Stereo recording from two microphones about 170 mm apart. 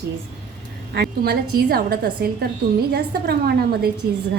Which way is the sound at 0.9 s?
70° right (ahead or behind).